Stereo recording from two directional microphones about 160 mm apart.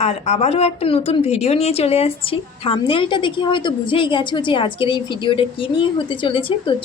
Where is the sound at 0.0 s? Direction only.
40° left (ahead or behind).